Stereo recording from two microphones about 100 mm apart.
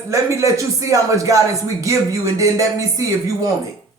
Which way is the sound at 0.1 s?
30° right (ahead or behind).